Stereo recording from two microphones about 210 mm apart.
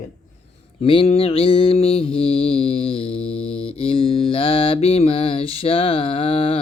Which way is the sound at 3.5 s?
25° left (ahead or behind).